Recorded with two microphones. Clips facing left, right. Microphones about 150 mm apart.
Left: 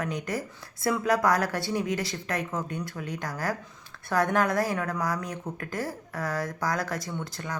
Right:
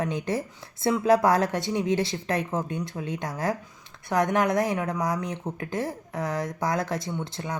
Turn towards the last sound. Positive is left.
turn(degrees=-25)  # may be behind; listen again after turning